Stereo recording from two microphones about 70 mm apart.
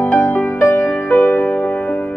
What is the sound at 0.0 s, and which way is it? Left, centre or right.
Music, left.